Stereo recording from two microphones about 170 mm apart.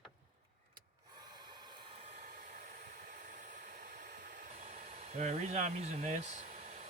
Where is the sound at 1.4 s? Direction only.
25° right (ahead or behind).